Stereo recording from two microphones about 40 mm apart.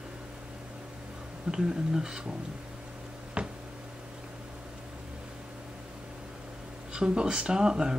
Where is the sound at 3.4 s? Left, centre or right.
Right.